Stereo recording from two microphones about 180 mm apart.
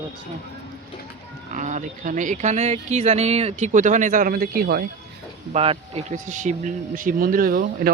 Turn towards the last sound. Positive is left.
turn(degrees=-50)  # may be behind; listen again after turning